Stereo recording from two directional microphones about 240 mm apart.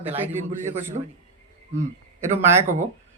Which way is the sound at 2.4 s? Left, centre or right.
Centre.